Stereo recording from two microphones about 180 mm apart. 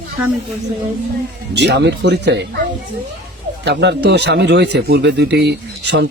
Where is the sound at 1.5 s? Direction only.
75° right (ahead or behind).